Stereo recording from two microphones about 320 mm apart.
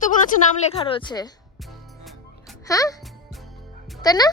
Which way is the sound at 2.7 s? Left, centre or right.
Centre.